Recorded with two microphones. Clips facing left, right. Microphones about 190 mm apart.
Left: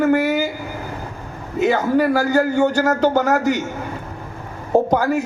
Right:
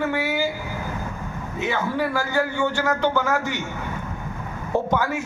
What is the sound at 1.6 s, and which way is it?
A man's voice, 40° left (ahead or behind).